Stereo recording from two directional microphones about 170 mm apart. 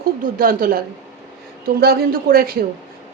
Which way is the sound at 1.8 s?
65° right (ahead or behind).